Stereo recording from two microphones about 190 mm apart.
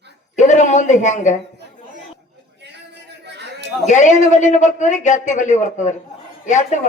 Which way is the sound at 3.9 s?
40° left (ahead or behind).